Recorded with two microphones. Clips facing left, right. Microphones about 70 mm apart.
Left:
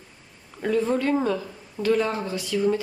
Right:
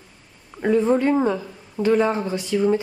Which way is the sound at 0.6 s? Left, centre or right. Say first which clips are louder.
Right 5 dB; right.